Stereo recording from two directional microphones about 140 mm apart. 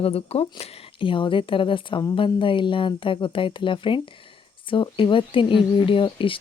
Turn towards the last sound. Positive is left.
turn(degrees=40)  # may be behind; listen again after turning